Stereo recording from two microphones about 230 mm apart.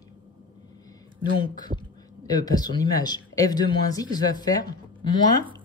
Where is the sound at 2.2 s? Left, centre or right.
Centre.